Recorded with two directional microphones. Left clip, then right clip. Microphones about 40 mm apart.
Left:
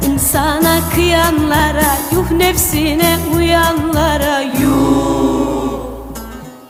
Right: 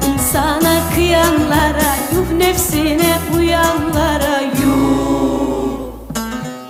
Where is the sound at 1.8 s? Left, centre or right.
Right.